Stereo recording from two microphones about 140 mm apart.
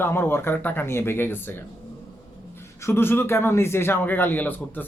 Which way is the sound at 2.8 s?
15° left (ahead or behind).